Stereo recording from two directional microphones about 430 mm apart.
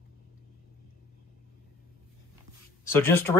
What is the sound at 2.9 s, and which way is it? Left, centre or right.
Speech, centre.